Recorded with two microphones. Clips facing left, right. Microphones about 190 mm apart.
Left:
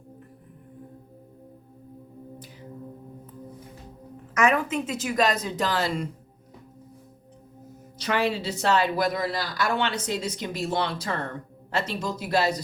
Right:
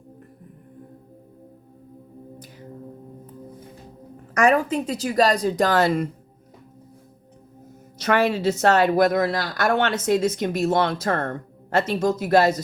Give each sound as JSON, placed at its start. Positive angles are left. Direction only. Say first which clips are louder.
{"t": 4.4, "sound": "a woman's voice", "louder": "right 4 dB", "side_deg": -40}
{"t": 5.8, "sound": "speech", "louder": "right 7 dB", "side_deg": -55}
{"t": 7.9, "sound": "speech", "louder": "right 5 dB", "side_deg": -55}